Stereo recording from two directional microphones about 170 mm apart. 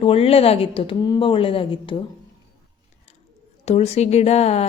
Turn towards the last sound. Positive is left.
turn(degrees=40)  # may be behind; listen again after turning